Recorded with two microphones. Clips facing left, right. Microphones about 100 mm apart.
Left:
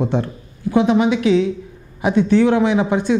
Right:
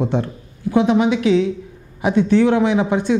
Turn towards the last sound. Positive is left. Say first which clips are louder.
# even
turn(degrees=15)  # may be behind; listen again after turning